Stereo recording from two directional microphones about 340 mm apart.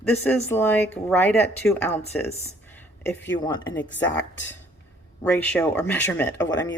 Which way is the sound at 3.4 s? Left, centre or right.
Centre.